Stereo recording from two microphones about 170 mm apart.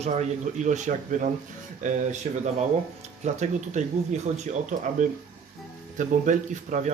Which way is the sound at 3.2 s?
45° right (ahead or behind).